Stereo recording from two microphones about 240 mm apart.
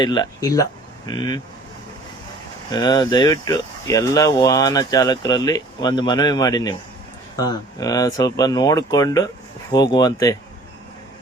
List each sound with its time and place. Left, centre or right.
0.0 s speech: centre
2.7 s speech: centre